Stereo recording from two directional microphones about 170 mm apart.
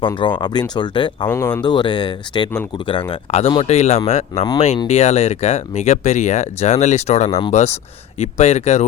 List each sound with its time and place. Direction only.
0.0 s speech: 30° left (ahead or behind)
1.3 s speech: 15° left (ahead or behind); by 8.9 s 40° left (ahead or behind)